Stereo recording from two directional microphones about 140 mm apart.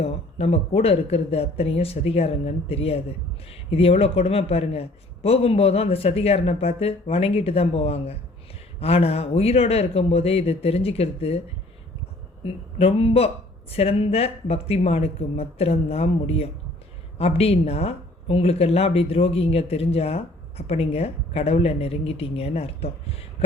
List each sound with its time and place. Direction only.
0.0 s speech: 45° left (ahead or behind)